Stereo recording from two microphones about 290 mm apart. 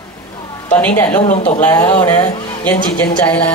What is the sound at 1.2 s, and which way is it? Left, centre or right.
Speech, left.